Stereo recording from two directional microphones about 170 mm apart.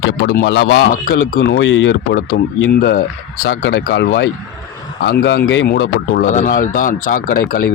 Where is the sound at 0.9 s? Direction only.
60° left (ahead or behind); by 2.6 s 80° left.